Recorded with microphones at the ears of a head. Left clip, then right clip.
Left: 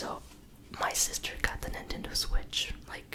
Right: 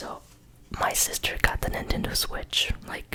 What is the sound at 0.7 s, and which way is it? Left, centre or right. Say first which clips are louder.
Speech: right 5 dB; right.